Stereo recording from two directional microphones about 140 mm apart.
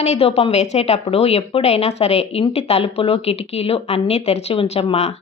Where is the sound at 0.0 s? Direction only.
45° left (ahead or behind).